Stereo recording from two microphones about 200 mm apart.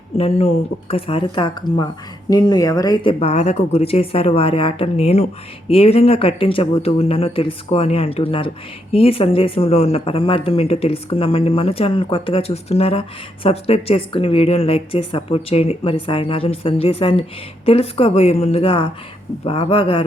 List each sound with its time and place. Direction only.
0.2 s speech: 30° left (ahead or behind)